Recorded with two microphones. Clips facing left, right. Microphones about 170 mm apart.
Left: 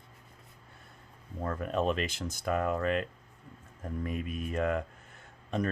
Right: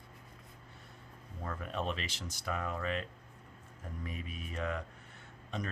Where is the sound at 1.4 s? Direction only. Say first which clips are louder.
Left 8 dB; 45° left (ahead or behind).